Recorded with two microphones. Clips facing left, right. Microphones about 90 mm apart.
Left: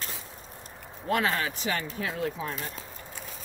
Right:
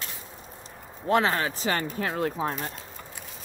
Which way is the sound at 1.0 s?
30° right (ahead or behind).